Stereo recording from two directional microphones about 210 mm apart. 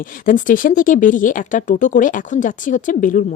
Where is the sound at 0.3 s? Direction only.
40° left (ahead or behind).